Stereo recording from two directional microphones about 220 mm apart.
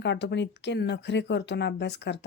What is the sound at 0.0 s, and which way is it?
Speech, 50° left (ahead or behind).